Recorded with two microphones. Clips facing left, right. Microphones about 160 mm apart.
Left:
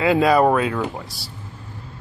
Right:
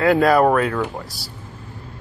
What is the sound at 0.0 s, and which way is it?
Speech, centre (ahead or behind).